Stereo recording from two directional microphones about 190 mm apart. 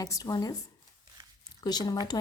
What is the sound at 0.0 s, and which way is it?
Speech, 20° left (ahead or behind).